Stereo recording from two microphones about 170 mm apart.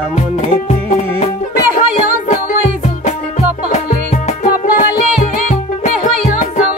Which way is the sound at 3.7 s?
40° left (ahead or behind).